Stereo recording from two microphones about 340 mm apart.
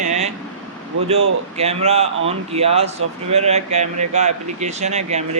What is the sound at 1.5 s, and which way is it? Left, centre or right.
Speech, centre.